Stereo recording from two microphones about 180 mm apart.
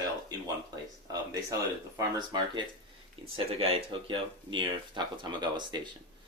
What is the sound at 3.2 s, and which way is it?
Speech, 30° right (ahead or behind).